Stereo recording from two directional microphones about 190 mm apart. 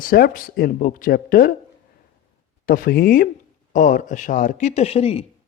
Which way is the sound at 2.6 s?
50° left (ahead or behind).